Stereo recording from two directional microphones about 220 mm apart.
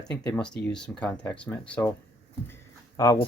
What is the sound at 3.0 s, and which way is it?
Speech, 15° left (ahead or behind).